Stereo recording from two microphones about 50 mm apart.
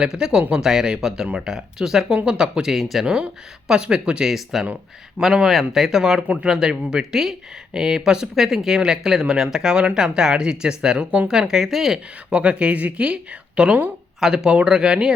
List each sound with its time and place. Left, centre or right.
0.0 s speech: centre
2.7 s speech: centre
3.7 s speech: centre
4.3 s speech: centre
12.3 s speech: right